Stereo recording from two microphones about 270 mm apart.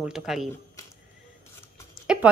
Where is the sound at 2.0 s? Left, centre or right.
Centre.